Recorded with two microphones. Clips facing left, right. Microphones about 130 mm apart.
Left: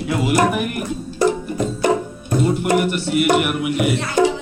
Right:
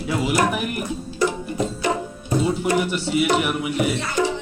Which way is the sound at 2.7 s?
55° left (ahead or behind).